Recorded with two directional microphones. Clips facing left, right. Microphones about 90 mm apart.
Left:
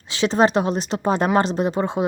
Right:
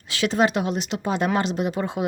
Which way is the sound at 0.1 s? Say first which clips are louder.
Left 3 dB; 30° left (ahead or behind).